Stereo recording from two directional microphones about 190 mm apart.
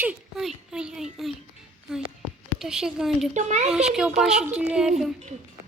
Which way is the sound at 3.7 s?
5° right (ahead or behind).